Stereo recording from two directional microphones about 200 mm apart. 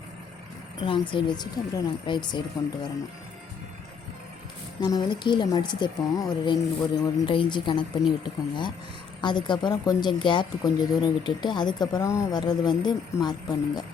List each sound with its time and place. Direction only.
0.8 s speech: 25° left (ahead or behind)
4.8 s speech: 20° left (ahead or behind)